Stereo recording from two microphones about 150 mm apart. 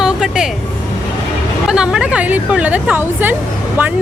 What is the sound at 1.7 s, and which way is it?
Speech, 5° right (ahead or behind).